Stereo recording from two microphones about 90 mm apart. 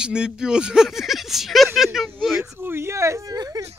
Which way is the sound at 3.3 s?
50° right (ahead or behind).